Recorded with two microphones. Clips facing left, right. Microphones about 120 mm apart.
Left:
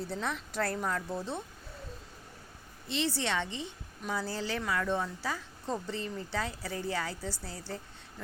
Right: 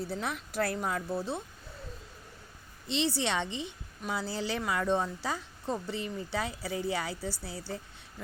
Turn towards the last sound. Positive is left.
turn(degrees=-10)  # may be behind; listen again after turning